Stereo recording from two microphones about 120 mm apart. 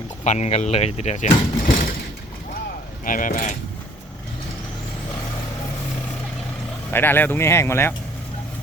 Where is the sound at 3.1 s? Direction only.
90° left.